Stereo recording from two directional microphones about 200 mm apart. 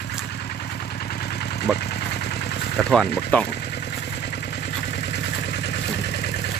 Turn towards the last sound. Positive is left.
turn(degrees=55)  # may be behind; listen again after turning